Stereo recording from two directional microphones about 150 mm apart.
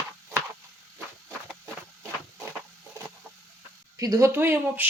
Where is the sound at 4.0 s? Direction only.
20° right (ahead or behind).